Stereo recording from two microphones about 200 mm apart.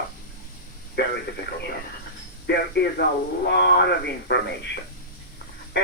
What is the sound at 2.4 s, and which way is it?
Speech, 55° left (ahead or behind).